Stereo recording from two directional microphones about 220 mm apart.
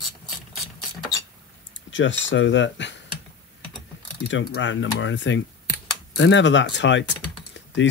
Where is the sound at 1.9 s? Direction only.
55° left (ahead or behind).